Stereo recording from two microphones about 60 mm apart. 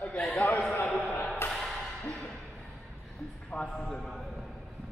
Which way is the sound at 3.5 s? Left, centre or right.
Centre.